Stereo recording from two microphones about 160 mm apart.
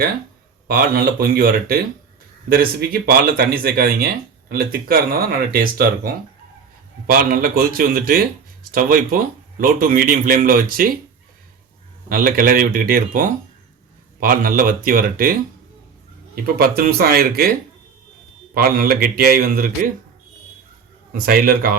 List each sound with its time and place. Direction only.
0.7 s speech: 70° right (ahead or behind)
7.1 s speech: 65° right (ahead or behind)
12.0 s speech: 60° right (ahead or behind)
18.5 s speech: 70° right (ahead or behind)
21.1 s speech: 65° right (ahead or behind)